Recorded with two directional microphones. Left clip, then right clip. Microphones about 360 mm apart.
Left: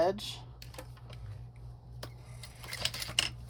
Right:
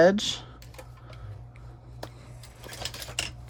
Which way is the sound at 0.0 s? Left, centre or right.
Right.